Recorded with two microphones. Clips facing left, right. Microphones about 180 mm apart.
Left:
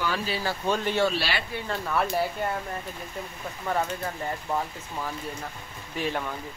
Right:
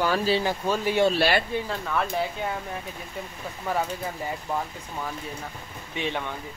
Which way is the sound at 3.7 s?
5° right (ahead or behind).